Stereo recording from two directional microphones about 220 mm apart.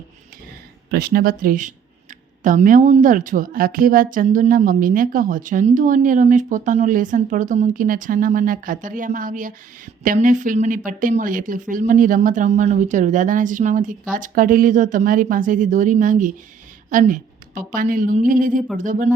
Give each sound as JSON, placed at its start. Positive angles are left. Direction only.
{"t": 0.9, "sound": "a woman's voice", "side_deg": -45}